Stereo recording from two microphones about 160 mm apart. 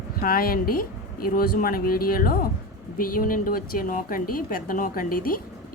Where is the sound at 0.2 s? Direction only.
65° left (ahead or behind).